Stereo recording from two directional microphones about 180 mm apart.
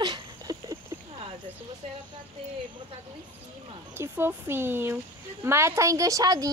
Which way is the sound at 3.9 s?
15° right (ahead or behind).